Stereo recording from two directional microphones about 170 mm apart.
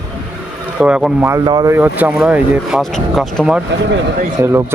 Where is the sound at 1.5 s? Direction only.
25° right (ahead or behind).